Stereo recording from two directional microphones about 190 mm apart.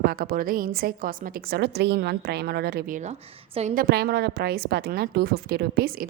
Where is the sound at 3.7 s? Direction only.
55° right (ahead or behind).